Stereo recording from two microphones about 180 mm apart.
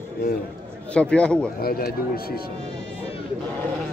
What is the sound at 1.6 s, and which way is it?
Speech, 55° left (ahead or behind).